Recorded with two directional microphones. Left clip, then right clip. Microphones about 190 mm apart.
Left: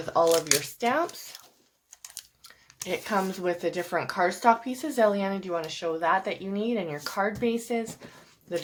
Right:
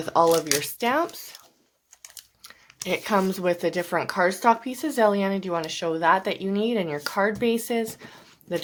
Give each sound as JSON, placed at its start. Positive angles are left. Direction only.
{"t": 0.0, "sound": "speech", "side_deg": -35}
{"t": 2.8, "sound": "speech", "side_deg": -35}